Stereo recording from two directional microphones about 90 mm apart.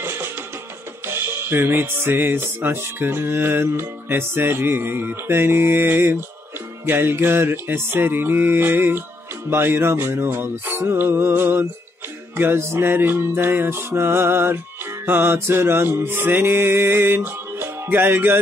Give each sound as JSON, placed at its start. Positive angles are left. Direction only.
{"t": 0.0, "sound": "music", "side_deg": -25}